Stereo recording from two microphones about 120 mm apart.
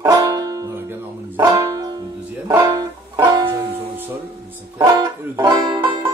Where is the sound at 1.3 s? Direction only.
40° right (ahead or behind).